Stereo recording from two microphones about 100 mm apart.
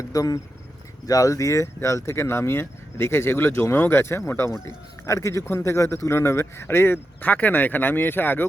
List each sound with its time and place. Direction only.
0.1 s speech: 35° left (ahead or behind); by 8.4 s 20° left (ahead or behind)